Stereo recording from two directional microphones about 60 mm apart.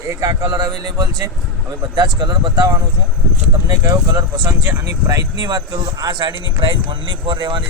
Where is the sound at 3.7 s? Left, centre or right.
Right.